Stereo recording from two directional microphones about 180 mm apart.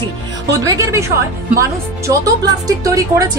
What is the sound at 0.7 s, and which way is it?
A woman's voice, 15° right (ahead or behind).